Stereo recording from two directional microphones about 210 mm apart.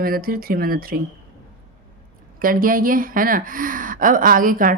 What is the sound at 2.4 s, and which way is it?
Speech, 40° right (ahead or behind).